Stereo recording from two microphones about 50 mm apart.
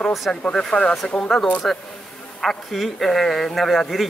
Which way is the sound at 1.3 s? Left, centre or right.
Centre.